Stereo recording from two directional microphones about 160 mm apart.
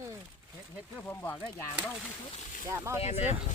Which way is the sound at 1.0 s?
15° left (ahead or behind).